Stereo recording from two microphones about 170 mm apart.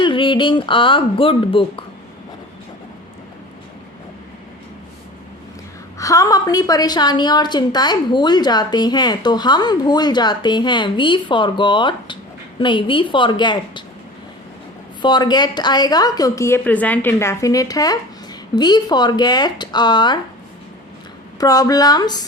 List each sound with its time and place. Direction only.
0.0 s a woman's voice: 30° left (ahead or behind)
6.0 s a woman's voice: 20° left (ahead or behind)
15.0 s a woman's voice: 25° left (ahead or behind)
21.3 s a woman's voice: 20° left (ahead or behind)